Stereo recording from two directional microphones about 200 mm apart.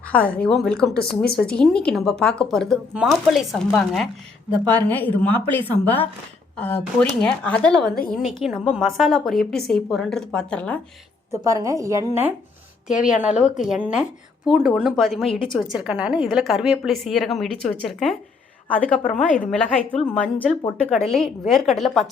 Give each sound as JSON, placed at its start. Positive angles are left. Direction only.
{"t": 0.1, "sound": "speech", "side_deg": 5}
{"t": 1.2, "sound": "speech", "side_deg": 50}
{"t": 1.5, "sound": "a woman's voice", "side_deg": 5}
{"t": 11.3, "sound": "a woman's voice", "side_deg": -15}
{"t": 15.3, "sound": "a woman's voice", "side_deg": 25}
{"t": 15.7, "sound": "speech", "side_deg": -5}